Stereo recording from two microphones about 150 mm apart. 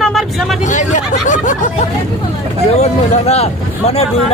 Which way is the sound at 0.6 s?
55° left (ahead or behind).